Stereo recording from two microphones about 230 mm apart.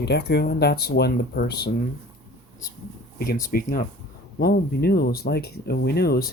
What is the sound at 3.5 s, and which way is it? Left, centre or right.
Speech, left.